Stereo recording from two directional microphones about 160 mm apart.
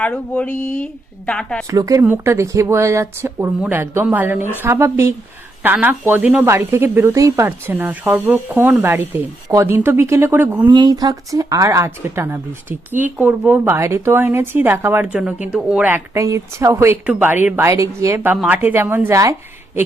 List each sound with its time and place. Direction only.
0.0 s speech: 10° left (ahead or behind)
1.7 s speech: 20° right (ahead or behind)
10.7 s speech: 25° right (ahead or behind)